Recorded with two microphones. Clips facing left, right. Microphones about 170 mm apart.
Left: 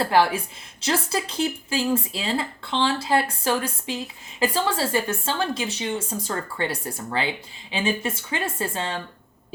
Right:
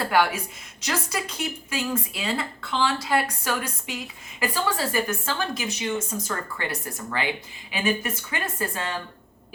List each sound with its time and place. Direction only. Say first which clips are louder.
0.0 s a woman's voice: left 3 dB; 30° left (ahead or behind)